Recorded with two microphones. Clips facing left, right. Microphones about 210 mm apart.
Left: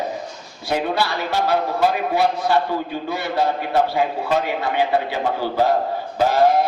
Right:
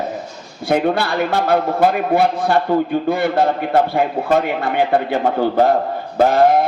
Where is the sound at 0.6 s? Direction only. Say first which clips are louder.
Right 5 dB; 55° right (ahead or behind).